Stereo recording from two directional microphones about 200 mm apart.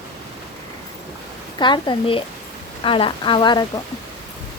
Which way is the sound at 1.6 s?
25° left (ahead or behind).